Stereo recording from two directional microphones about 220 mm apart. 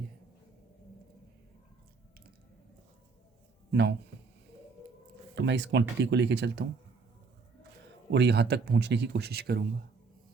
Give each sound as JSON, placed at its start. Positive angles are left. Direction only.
{"t": 3.7, "sound": "a man's voice", "side_deg": -50}
{"t": 5.3, "sound": "speech", "side_deg": -50}
{"t": 8.1, "sound": "speech", "side_deg": -50}